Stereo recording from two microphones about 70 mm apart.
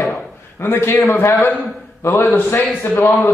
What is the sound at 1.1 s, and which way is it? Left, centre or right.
Speech, left.